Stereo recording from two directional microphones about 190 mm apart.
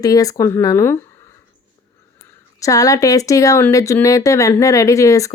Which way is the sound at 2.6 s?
15° left (ahead or behind).